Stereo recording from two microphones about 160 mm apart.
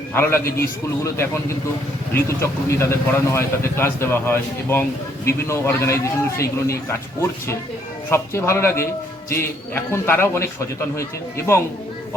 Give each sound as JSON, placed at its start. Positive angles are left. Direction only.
{"t": 0.1, "sound": "speech", "side_deg": 15}